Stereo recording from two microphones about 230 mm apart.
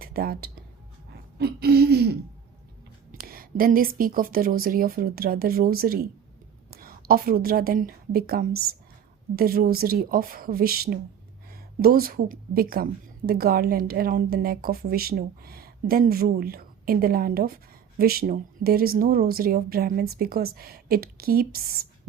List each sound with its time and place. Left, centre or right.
0.0 s speech: right
1.4 s a sound: right
3.1 s a woman's voice: right